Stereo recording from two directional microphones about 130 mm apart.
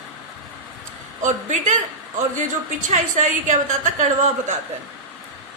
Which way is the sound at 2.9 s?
70° right (ahead or behind).